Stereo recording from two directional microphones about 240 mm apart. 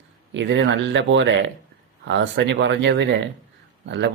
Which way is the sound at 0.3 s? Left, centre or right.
Right.